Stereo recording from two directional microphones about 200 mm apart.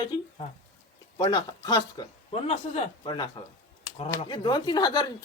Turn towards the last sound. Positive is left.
turn(degrees=20)  # may be behind; listen again after turning